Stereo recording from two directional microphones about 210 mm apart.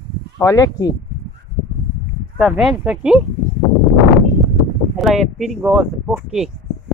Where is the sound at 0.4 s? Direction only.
15° left (ahead or behind).